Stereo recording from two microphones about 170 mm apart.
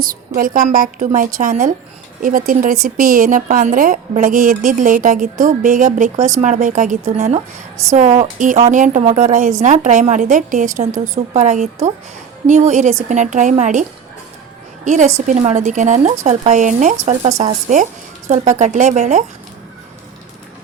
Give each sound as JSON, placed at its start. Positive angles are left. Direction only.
{"t": 0.0, "sound": "a woman's voice", "side_deg": -55}
{"t": 14.8, "sound": "a woman's voice", "side_deg": -45}